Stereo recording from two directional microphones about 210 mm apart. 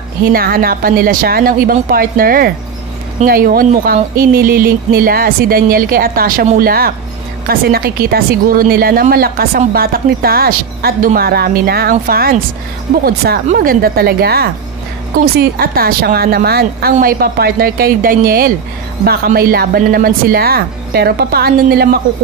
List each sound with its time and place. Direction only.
0.2 s speech: 45° right (ahead or behind)